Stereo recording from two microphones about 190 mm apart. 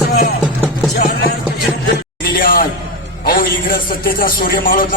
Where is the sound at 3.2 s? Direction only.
50° left (ahead or behind).